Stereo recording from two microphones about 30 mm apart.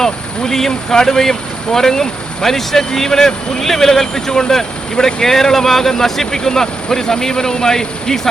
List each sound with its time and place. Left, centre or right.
0.0 s speech: centre